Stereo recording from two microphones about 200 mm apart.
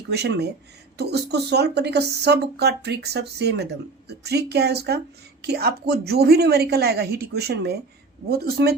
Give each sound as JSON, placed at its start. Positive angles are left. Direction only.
{"t": 0.1, "sound": "a woman's voice", "side_deg": -55}